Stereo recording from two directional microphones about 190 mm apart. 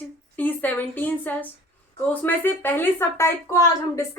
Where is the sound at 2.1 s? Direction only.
10° left (ahead or behind).